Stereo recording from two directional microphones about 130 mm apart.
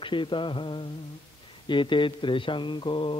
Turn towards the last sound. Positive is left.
turn(degrees=40)  # may be behind; listen again after turning